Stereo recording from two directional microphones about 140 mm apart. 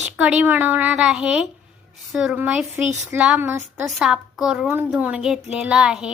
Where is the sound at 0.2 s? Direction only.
10° right (ahead or behind).